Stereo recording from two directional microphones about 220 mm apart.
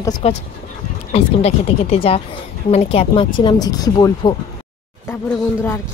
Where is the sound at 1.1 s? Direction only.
30° left (ahead or behind).